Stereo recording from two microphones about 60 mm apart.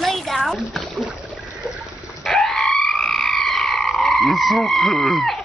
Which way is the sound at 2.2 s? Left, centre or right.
Centre.